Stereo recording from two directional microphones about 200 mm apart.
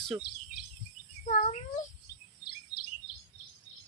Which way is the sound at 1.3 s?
35° left (ahead or behind).